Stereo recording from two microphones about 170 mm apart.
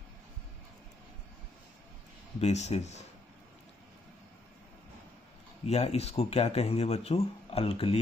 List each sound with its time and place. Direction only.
2.4 s speech: 40° left (ahead or behind)
5.7 s speech: 40° left (ahead or behind)